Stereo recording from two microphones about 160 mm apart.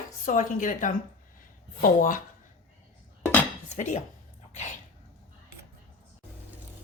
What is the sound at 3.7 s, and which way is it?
Speech, 45° left (ahead or behind).